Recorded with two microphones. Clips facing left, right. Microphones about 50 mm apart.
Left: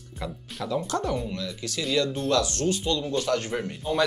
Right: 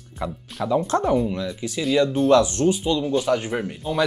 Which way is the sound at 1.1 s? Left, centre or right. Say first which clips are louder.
Right 8 dB; centre.